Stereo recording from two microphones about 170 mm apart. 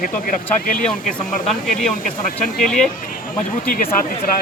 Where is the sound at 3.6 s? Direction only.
55° left (ahead or behind).